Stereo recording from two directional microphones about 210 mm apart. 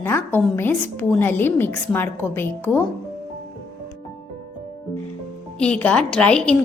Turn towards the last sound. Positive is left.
turn(degrees=5)  # may be behind; listen again after turning